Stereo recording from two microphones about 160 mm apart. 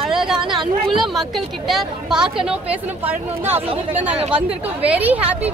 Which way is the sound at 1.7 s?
Centre (ahead or behind).